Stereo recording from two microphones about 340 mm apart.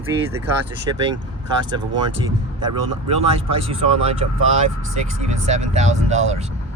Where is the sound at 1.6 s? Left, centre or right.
Centre.